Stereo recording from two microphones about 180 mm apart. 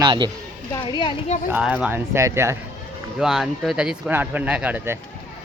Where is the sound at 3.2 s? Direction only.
Centre (ahead or behind).